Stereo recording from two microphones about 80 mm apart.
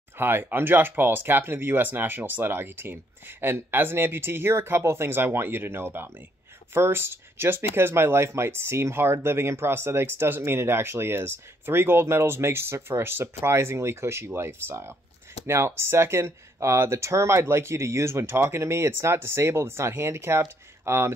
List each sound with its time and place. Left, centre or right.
0.2 s speech: right